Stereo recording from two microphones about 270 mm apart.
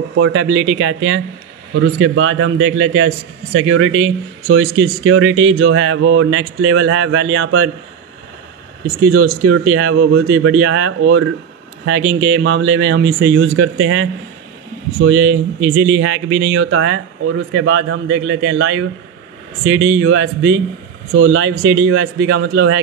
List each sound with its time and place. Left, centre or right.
0.2 s speech: right
9.0 s speech: right